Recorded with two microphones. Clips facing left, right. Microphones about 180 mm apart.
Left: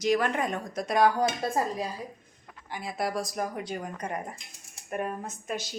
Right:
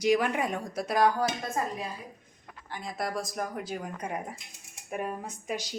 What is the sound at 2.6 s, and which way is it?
Speech, 10° left (ahead or behind).